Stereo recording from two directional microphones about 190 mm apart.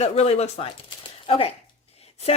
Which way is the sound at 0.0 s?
35° left (ahead or behind).